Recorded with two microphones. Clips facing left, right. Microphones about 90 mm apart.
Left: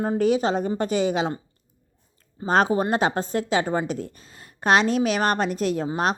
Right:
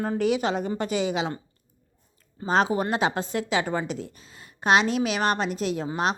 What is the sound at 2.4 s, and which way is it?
A woman's voice, 45° left (ahead or behind).